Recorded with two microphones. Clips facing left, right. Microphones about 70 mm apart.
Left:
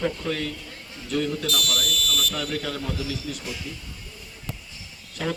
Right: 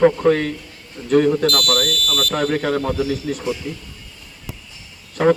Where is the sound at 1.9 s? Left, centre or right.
Centre.